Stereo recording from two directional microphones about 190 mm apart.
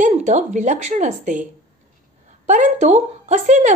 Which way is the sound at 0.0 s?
40° right (ahead or behind).